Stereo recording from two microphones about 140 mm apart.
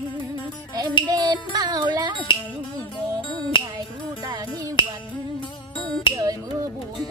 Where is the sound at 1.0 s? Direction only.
30° right (ahead or behind).